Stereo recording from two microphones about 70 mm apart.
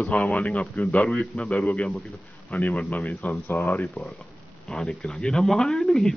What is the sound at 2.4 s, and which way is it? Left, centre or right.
Speech, left.